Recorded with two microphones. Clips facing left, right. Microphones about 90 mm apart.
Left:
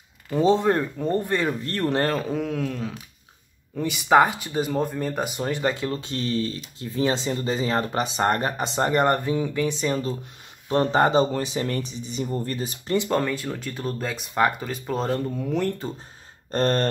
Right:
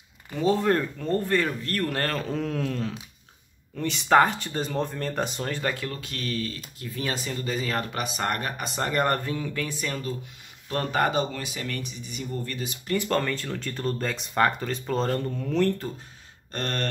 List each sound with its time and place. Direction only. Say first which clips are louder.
0.3 s speech: left 3 dB; 25° left (ahead or behind)
12.9 s speech: left 3 dB; 15° left (ahead or behind)
16.5 s speech: left 9 dB; 35° left (ahead or behind)